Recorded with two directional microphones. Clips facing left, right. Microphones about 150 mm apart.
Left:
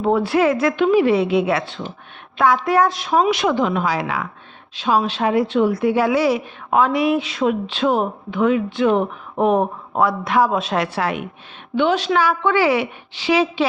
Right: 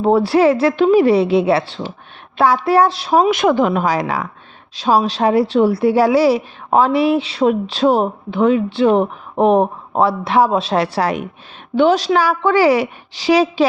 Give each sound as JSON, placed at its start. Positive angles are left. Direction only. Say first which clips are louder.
{"t": 0.0, "sound": "a woman's voice", "louder": "right 4 dB", "side_deg": -35}
{"t": 3.2, "sound": "a woman's voice", "louder": "right 4 dB", "side_deg": -50}